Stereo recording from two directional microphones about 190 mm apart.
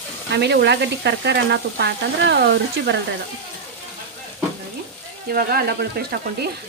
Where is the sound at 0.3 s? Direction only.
65° right (ahead or behind).